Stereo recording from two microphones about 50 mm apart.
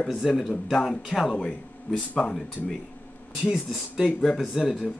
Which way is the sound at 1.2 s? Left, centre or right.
Centre.